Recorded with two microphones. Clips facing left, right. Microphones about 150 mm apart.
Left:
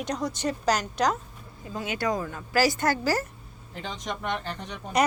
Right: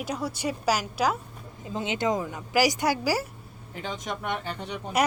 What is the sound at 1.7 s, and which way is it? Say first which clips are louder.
A woman's voice: right 2 dB; 25° right (ahead or behind).